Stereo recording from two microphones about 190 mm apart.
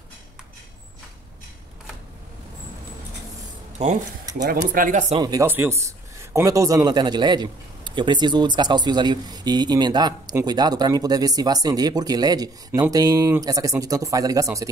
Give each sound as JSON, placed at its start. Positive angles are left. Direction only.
{"t": 3.7, "sound": "speech", "side_deg": -40}
{"t": 5.1, "sound": "speech", "side_deg": -20}